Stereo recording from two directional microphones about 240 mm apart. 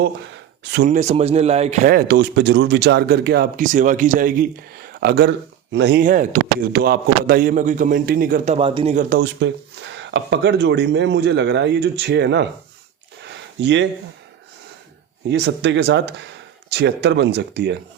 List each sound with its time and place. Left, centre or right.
0.9 s a man's voice: right
13.2 s a sound: right
15.3 s speech: right